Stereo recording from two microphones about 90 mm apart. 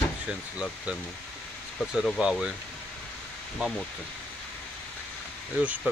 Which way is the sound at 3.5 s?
Centre (ahead or behind).